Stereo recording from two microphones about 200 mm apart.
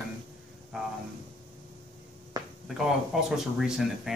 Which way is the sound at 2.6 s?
Centre (ahead or behind).